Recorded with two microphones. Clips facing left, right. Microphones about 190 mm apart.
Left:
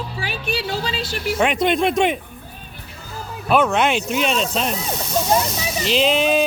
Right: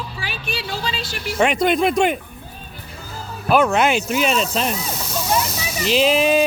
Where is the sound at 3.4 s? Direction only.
Centre (ahead or behind).